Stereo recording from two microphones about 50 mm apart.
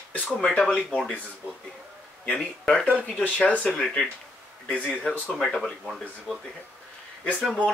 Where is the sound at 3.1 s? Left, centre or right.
Left.